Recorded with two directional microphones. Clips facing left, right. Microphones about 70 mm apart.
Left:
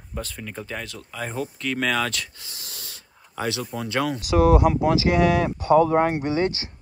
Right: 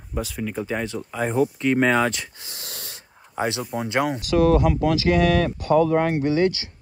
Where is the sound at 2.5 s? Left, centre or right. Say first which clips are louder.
Right 3 dB; right.